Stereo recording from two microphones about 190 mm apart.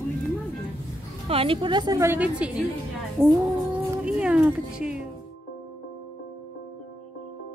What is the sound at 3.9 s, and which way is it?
Music, 5° right (ahead or behind).